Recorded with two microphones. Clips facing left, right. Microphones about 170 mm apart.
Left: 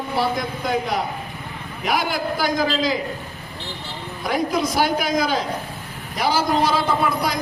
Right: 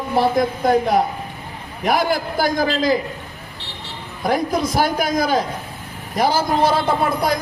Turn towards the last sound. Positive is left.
turn(degrees=-50)  # may be behind; listen again after turning